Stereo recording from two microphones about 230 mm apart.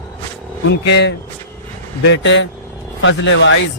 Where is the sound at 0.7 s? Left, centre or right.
Left.